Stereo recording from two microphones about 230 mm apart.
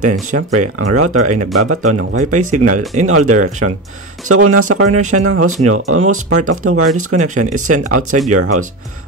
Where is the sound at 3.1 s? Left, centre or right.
Right.